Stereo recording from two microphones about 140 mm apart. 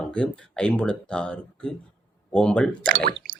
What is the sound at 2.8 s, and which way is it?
Speech, 85° right.